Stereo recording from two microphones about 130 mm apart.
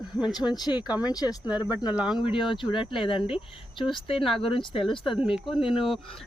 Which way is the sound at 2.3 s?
40° left (ahead or behind).